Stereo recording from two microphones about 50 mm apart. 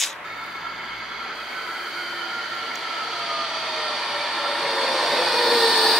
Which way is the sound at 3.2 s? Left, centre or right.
Centre.